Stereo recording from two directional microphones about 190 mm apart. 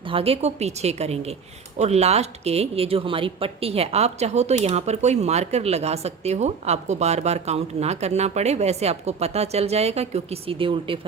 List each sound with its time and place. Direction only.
0.1 s speech: 30° right (ahead or behind)